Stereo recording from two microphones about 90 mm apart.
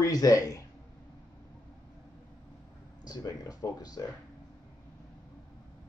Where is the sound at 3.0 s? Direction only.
45° left (ahead or behind).